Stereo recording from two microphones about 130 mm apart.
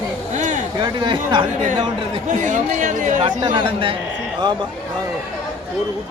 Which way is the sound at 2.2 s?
75° right (ahead or behind).